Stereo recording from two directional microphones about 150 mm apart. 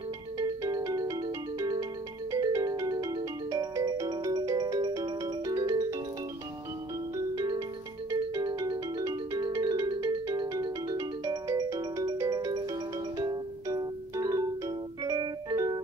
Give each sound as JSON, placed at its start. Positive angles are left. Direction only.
{"t": 0.4, "sound": "music", "side_deg": -20}
{"t": 7.2, "sound": "music", "side_deg": -25}